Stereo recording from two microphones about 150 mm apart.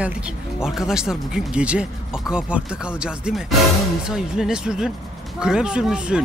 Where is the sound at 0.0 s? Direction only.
5° right (ahead or behind).